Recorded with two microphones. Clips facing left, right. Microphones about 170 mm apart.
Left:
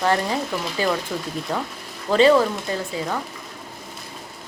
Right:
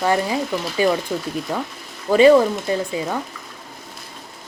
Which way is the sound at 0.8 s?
15° right (ahead or behind).